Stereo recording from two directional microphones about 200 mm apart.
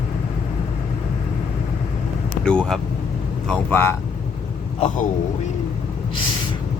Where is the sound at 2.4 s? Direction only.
5° left (ahead or behind).